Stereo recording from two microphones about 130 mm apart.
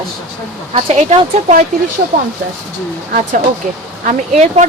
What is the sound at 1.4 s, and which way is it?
Speech, 65° right (ahead or behind).